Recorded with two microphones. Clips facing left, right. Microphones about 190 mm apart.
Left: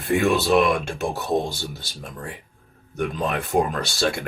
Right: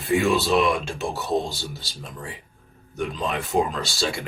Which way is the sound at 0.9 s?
60° left (ahead or behind).